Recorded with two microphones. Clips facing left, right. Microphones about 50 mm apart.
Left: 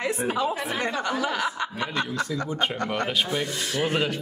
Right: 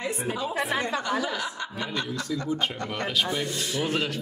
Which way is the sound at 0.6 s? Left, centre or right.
Centre.